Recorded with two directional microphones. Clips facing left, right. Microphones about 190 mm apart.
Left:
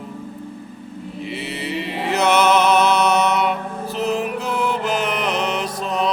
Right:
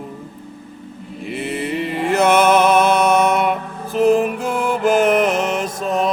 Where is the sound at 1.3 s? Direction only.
50° right (ahead or behind).